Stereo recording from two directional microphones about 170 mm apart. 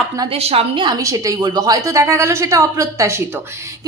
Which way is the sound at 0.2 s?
35° right (ahead or behind).